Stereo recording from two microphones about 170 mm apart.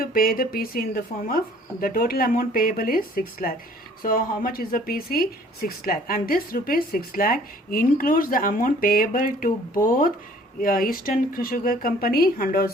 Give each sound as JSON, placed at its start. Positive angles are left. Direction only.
{"t": 0.0, "sound": "speech", "side_deg": 55}